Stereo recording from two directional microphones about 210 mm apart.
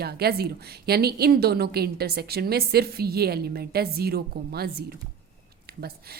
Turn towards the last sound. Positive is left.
turn(degrees=-50)  # may be behind; listen again after turning